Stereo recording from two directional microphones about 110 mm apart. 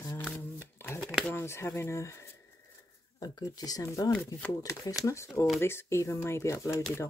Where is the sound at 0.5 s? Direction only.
20° left (ahead or behind).